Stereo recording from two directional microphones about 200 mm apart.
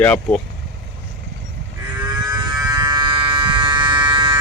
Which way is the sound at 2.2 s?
20° right (ahead or behind).